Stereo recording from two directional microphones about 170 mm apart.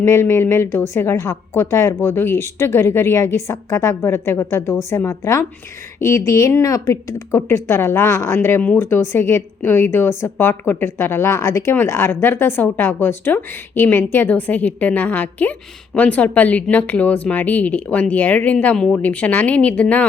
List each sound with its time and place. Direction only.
0.0 s speech: 15° left (ahead or behind)